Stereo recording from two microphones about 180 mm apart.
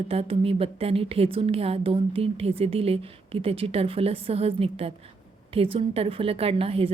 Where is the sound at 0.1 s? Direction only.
35° right (ahead or behind).